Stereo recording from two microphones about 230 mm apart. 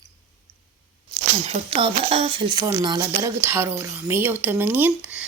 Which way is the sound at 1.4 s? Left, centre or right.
Right.